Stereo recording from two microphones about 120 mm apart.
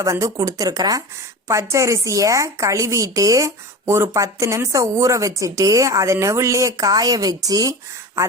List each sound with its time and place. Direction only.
0.0 s a woman's voice: 30° right (ahead or behind)